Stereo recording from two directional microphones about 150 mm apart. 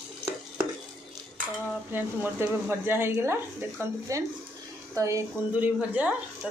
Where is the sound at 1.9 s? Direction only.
15° right (ahead or behind).